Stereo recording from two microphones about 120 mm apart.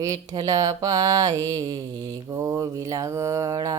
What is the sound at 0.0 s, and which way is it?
Mantra, 30° right (ahead or behind).